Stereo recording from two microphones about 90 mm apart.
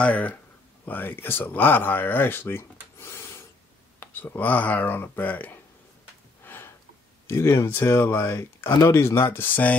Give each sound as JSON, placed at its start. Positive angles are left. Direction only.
{"t": 0.0, "sound": "speech", "side_deg": 15}
{"t": 3.0, "sound": "rub", "side_deg": 30}
{"t": 4.0, "sound": "speech", "side_deg": 25}
{"t": 6.4, "sound": "gasp", "side_deg": 25}
{"t": 7.2, "sound": "speech", "side_deg": 30}